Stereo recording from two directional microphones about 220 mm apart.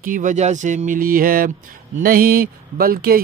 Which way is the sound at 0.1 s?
35° right (ahead or behind).